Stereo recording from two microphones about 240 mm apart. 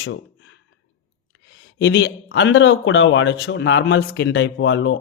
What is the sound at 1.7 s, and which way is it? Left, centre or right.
Speech, left.